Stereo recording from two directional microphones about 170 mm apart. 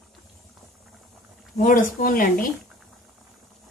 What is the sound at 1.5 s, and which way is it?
Speech, 50° left (ahead or behind).